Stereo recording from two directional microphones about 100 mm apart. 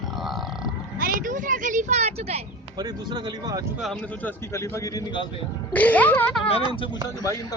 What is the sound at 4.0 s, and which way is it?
Speech, 15° left (ahead or behind).